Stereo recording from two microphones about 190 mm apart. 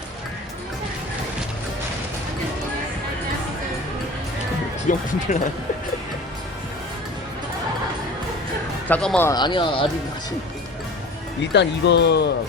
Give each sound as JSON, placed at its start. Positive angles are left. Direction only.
{"t": 4.9, "sound": "speech", "side_deg": 40}
{"t": 8.9, "sound": "speech", "side_deg": 5}
{"t": 9.3, "sound": "speech", "side_deg": 25}
{"t": 11.5, "sound": "speech", "side_deg": 65}